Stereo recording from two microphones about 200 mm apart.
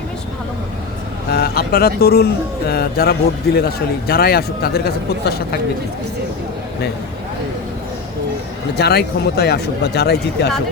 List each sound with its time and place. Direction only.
1.3 s speech: 50° left (ahead or behind)
8.8 s speech: 55° left (ahead or behind)